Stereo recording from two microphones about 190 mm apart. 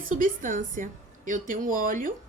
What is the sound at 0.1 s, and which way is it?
A woman's voice, 45° right (ahead or behind).